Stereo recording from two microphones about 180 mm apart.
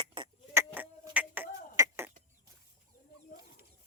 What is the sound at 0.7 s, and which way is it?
Music, 10° right (ahead or behind).